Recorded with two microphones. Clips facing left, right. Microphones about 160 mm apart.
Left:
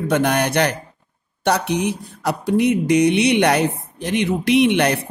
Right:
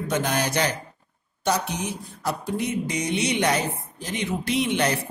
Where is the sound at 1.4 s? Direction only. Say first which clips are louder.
Left 6 dB; 65° left (ahead or behind).